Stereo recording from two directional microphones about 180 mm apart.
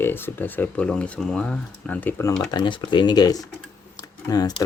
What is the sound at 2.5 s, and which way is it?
Speech, 25° left (ahead or behind).